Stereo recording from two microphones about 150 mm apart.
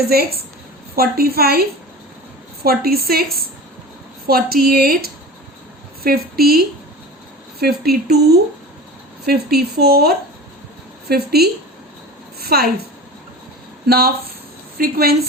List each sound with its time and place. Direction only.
0.1 s a woman's voice: 90° right
2.6 s a woman's voice: 90° right
9.2 s a woman's voice: 90° right
13.8 s a woman's voice: 90° right